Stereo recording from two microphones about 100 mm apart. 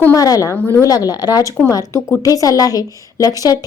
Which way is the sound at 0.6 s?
25° left (ahead or behind).